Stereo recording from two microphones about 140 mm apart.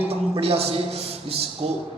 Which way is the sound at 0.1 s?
45° right (ahead or behind).